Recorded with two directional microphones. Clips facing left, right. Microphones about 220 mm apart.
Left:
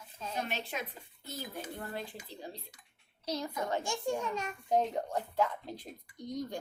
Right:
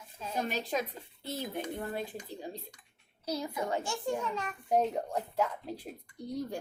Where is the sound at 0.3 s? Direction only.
40° right (ahead or behind); by 2.0 s 20° right (ahead or behind).